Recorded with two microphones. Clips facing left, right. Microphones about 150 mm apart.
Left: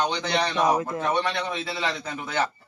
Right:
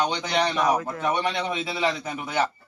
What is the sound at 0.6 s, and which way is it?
Speech, 25° left (ahead or behind).